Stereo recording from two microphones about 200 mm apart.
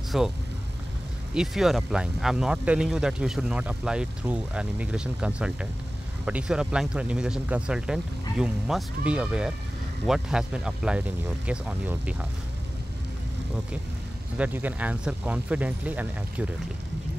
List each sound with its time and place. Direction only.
0.1 s speech: centre (ahead or behind)
1.3 s speech: centre (ahead or behind)
14.3 s speech: 10° right (ahead or behind)